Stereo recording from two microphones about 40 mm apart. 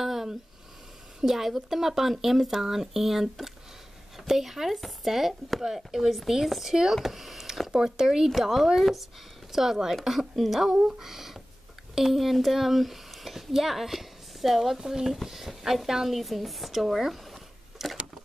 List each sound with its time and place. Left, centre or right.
0.0 s a sound: centre
1.2 s speech: centre
10.7 s speech: right
11.0 s speech: centre